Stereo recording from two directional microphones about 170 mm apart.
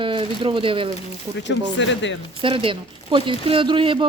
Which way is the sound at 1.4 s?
90° left.